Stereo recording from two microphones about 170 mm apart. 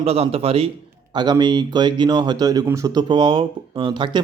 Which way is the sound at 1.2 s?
25° right (ahead or behind).